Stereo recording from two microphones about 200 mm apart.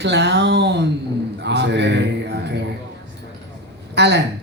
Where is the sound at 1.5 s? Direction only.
60° right (ahead or behind).